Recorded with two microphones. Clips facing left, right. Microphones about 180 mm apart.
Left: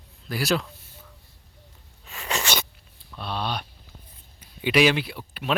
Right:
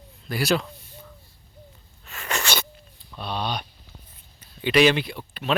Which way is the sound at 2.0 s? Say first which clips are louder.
Even; centre (ahead or behind).